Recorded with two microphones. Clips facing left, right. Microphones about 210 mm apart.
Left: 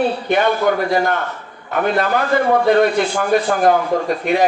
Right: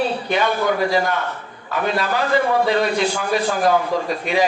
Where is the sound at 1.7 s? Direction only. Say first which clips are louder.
Left 4 dB; 55° left (ahead or behind).